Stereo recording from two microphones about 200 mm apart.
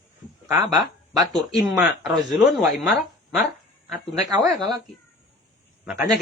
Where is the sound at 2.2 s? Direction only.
Centre (ahead or behind).